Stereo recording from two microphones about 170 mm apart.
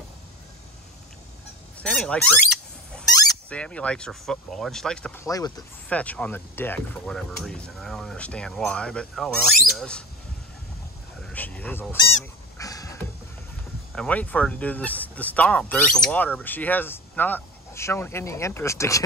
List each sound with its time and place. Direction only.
1.8 s speech: 5° left (ahead or behind)
5.2 s speech: 20° left (ahead or behind)
5.9 s speech: 10° left (ahead or behind)
11.1 s goose: 5° left (ahead or behind)
12.5 s a sound: 20° left (ahead or behind)
13.9 s speech: 10° left (ahead or behind)